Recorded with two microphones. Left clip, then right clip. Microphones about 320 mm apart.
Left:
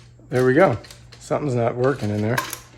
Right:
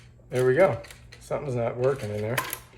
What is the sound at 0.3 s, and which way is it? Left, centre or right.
Speech, left.